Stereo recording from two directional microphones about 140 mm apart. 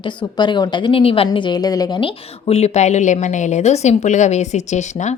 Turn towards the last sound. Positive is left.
turn(degrees=55)  # may be behind; listen again after turning